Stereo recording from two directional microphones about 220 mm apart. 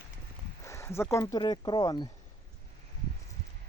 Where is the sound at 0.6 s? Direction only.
15° left (ahead or behind).